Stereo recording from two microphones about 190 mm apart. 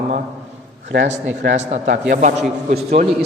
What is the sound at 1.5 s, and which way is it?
Speech, 40° right (ahead or behind).